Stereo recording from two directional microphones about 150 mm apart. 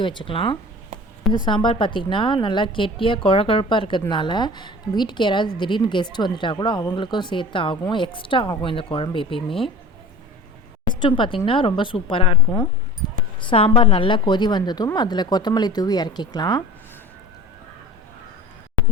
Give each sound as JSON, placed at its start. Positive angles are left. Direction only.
{"t": 0.0, "sound": "a woman's voice", "side_deg": 35}
{"t": 11.0, "sound": "a woman's voice", "side_deg": 35}
{"t": 13.5, "sound": "a woman's voice", "side_deg": 35}